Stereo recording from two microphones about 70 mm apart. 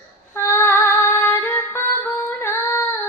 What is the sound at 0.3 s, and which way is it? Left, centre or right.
Female singing, left.